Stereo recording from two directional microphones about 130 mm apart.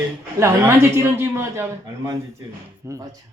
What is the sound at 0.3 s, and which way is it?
Speech, 20° right (ahead or behind).